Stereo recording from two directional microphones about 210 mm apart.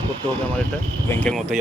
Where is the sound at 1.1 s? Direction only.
5° left (ahead or behind).